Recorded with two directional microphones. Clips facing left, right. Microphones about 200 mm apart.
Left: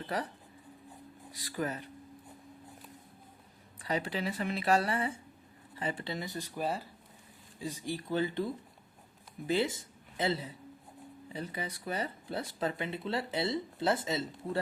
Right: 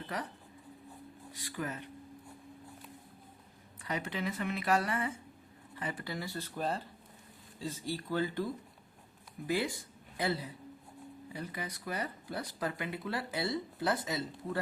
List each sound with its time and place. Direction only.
1.3 s speech: 35° left (ahead or behind)
3.8 s speech: 35° left (ahead or behind)